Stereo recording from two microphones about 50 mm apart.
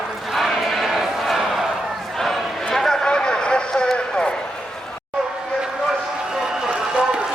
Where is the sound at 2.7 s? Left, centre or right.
Centre.